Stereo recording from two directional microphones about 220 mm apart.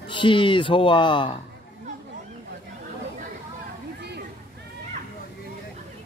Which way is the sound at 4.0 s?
50° right (ahead or behind).